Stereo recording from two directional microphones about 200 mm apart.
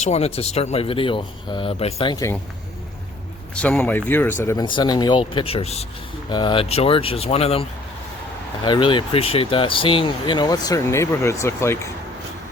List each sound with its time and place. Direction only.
0.0 s speech: 30° left (ahead or behind)
3.5 s speech: 5° left (ahead or behind); by 7.6 s 30° left (ahead or behind)
8.6 s speech: 25° left (ahead or behind)